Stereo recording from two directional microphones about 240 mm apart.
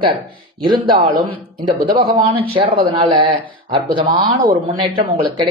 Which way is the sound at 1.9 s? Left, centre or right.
Right.